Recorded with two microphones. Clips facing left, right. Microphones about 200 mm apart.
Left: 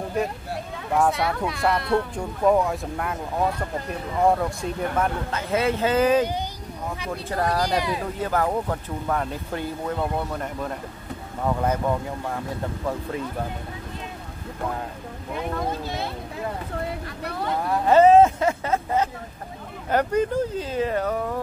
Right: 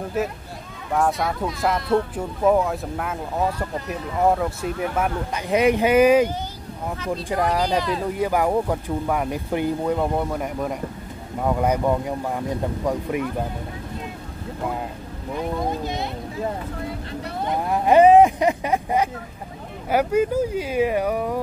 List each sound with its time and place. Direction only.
0.2 s speech: 5° right (ahead or behind)
4.2 s speech: 5° right (ahead or behind)
7.7 s speech: 10° left (ahead or behind)
8.2 s speech: 10° right (ahead or behind)
15.5 s speech: 15° right (ahead or behind)
17.4 s speech: 20° right (ahead or behind)